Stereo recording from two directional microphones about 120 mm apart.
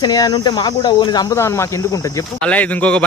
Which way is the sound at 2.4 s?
10° left (ahead or behind).